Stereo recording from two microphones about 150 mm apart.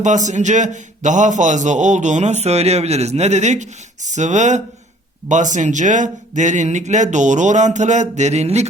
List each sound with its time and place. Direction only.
0.0 s a man's voice: 55° right (ahead or behind)